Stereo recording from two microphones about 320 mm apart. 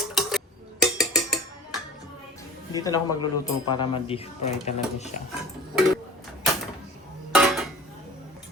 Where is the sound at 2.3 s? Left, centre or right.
Centre.